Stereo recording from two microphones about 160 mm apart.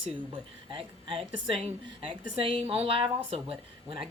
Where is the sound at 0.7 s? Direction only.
30° right (ahead or behind).